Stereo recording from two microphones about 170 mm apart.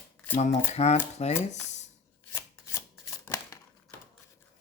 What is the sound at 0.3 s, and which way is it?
Speech, 40° left (ahead or behind).